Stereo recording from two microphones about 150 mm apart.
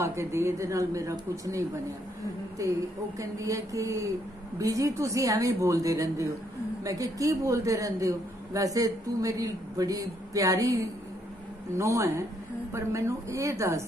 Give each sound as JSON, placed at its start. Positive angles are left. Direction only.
{"t": 0.0, "sound": "a man's voice", "side_deg": -15}